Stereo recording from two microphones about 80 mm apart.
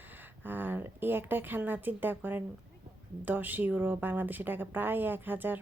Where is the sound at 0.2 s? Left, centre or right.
Right.